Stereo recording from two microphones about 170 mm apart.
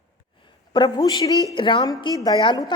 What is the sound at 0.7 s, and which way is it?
A woman's voice, 25° left (ahead or behind).